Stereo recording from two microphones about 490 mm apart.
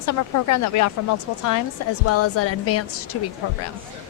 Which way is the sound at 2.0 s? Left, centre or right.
Left.